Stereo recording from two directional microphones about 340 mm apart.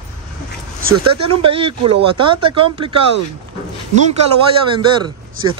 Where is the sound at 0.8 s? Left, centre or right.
Right.